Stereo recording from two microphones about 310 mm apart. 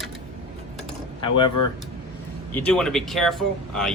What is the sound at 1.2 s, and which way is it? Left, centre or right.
Speech, centre.